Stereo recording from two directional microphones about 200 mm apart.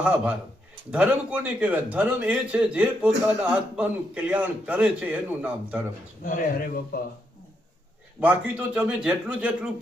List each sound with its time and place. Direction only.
0.0 s a man's voice: 5° right (ahead or behind)
6.2 s speech: 45° left (ahead or behind)
8.2 s a man's voice: 5° right (ahead or behind)